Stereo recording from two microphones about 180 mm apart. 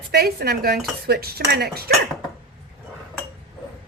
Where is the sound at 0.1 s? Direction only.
60° right (ahead or behind).